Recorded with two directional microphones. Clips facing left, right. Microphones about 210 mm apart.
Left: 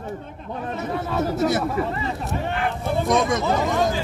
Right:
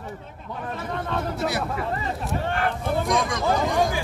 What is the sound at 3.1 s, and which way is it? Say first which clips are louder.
Speech: left 5 dB; 25° left (ahead or behind).